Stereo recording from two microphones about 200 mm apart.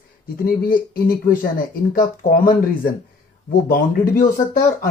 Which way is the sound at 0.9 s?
45° left (ahead or behind).